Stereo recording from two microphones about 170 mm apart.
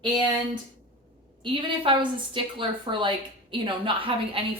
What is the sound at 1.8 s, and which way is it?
A woman's voice, 30° right (ahead or behind).